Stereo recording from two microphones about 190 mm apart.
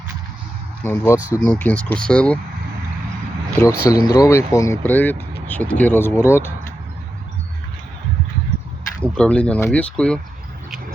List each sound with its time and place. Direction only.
0.9 s speech: 15° left (ahead or behind)
3.6 s speech: 15° left (ahead or behind)
9.1 s speech: 5° left (ahead or behind)